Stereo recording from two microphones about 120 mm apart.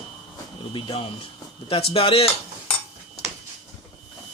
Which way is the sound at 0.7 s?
45° left (ahead or behind).